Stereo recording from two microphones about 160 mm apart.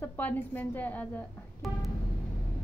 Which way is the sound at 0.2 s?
10° left (ahead or behind).